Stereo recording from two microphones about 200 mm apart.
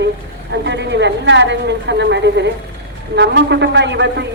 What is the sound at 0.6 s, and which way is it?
A man's voice, 60° right (ahead or behind).